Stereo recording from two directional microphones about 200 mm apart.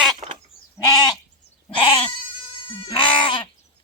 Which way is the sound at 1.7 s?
25° left (ahead or behind).